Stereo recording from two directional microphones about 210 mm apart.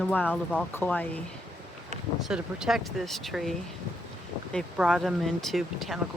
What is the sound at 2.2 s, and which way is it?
Speech, 5° right (ahead or behind).